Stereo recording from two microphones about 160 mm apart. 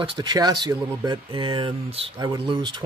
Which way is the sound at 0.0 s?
30° right (ahead or behind).